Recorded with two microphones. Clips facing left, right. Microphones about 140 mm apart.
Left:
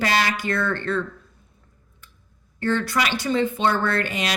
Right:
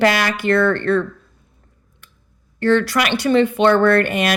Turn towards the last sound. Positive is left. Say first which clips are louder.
# right 9 dB
turn(degrees=-60)  # may be behind; listen again after turning